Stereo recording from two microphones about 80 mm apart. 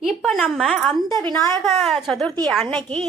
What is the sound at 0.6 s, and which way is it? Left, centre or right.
A woman's voice, centre.